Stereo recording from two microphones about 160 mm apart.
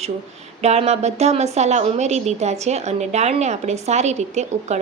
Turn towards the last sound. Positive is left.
turn(degrees=-45)  # may be behind; listen again after turning